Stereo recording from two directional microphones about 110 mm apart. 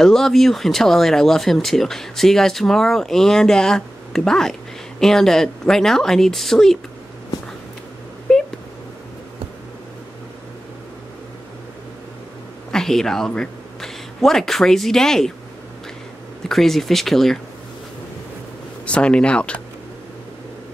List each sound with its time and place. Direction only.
0.0 s speech: 5° left (ahead or behind)
8.3 s a sound: 5° left (ahead or behind)
12.7 s speech: 5° left (ahead or behind)
16.4 s speech: 5° left (ahead or behind)
18.9 s speech: 10° left (ahead or behind)